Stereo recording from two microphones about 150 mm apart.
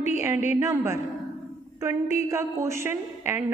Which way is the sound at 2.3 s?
20° right (ahead or behind).